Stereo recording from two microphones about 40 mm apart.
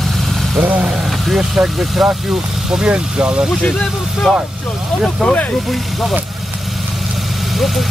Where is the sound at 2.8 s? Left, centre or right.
Right.